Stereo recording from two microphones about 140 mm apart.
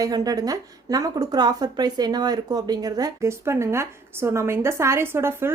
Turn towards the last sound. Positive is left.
turn(degrees=-15)  # may be behind; listen again after turning